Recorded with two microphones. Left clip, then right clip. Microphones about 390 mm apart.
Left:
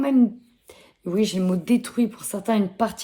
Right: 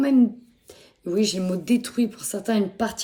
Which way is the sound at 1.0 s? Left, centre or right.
Centre.